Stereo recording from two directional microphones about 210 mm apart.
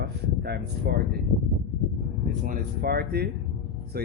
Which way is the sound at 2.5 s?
45° right (ahead or behind).